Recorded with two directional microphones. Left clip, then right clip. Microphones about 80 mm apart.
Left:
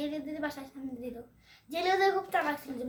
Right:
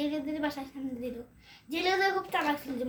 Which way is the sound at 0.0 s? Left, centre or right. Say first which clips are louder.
Right 3 dB; left.